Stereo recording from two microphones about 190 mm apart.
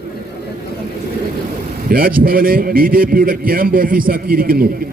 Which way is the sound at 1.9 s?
50° right (ahead or behind).